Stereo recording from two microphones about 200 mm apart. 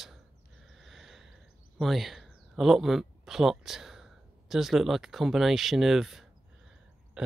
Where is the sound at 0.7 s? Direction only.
Centre (ahead or behind).